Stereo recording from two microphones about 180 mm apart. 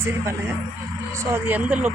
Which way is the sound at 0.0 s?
15° right (ahead or behind).